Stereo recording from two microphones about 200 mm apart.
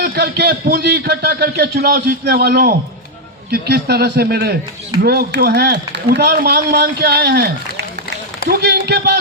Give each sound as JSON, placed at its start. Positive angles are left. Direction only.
{"t": 0.0, "sound": "speech", "side_deg": -55}